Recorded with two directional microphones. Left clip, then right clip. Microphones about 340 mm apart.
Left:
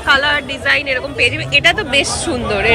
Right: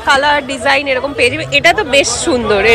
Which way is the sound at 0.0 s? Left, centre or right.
Centre.